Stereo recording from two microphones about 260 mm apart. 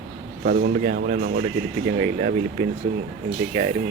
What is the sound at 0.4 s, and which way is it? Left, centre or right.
A man's voice, right.